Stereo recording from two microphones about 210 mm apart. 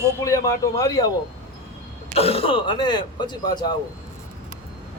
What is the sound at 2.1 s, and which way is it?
A man's voice, 30° left (ahead or behind).